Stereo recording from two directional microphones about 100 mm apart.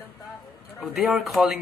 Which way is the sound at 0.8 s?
Centre (ahead or behind).